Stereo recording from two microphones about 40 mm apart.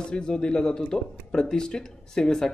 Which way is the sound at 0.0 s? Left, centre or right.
Left.